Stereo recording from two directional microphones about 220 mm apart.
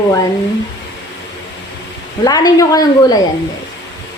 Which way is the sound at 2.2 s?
15° left (ahead or behind).